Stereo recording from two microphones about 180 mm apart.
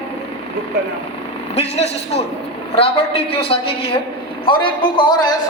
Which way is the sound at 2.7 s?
30° left (ahead or behind).